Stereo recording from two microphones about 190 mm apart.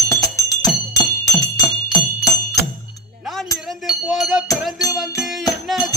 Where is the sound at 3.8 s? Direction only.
Centre (ahead or behind).